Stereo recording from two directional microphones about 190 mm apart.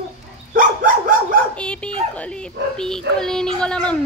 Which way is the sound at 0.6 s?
45° right (ahead or behind).